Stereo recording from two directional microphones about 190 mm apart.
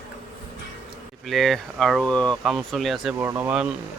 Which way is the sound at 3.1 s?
15° right (ahead or behind).